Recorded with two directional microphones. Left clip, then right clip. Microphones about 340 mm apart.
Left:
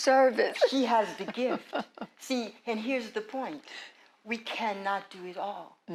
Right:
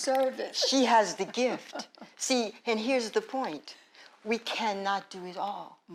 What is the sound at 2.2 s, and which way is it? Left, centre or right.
A woman's voice, right.